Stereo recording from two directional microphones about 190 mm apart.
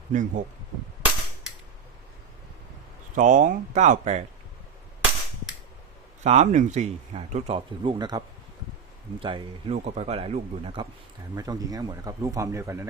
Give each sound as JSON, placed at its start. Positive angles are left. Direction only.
{"t": 0.1, "sound": "speech", "side_deg": -40}
{"t": 3.2, "sound": "speech", "side_deg": -40}
{"t": 6.2, "sound": "speech", "side_deg": -35}
{"t": 9.2, "sound": "speech", "side_deg": -30}
{"t": 11.3, "sound": "speech", "side_deg": -20}